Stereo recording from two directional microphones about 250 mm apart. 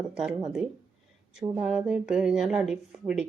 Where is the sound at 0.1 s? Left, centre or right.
Centre.